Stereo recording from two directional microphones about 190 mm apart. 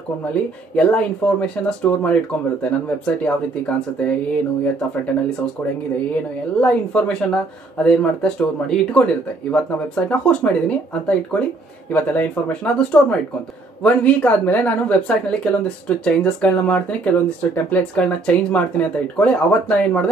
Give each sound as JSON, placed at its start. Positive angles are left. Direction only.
{"t": 0.3, "sound": "speech", "side_deg": 5}
{"t": 3.2, "sound": "speech", "side_deg": 5}
{"t": 6.6, "sound": "speech", "side_deg": 5}